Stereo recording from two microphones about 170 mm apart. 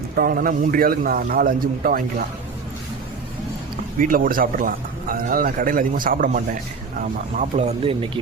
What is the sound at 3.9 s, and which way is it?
A man's voice, 55° right (ahead or behind).